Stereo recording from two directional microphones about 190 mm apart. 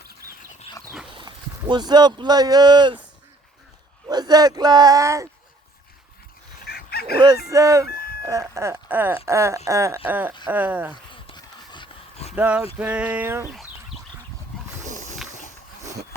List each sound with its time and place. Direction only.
1.1 s speech: 25° right (ahead or behind)
4.1 s speech: 20° right (ahead or behind)
6.7 s fowl: 55° left (ahead or behind)
7.4 s speech: 15° right (ahead or behind)
7.9 s chicken: 55° left (ahead or behind)
8.2 s speech: 15° right (ahead or behind)
11.1 s a sound: 25° left (ahead or behind)
12.3 s speech: 5° right (ahead or behind)
14.8 s wild animals: 40° right (ahead or behind)